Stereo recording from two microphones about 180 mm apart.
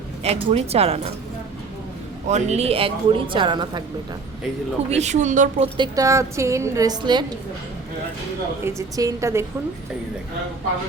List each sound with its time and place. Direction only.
0.2 s speech: 35° right (ahead or behind)
2.2 s speech: 40° right (ahead or behind)
4.9 s speech: 40° right (ahead or behind)
5.7 s a woman's voice: 20° right (ahead or behind)
8.6 s a woman's voice: 15° right (ahead or behind)